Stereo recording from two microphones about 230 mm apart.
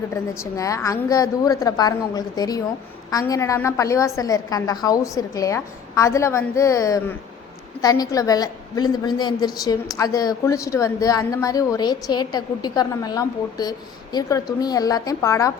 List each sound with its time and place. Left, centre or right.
0.3 s a woman's voice: centre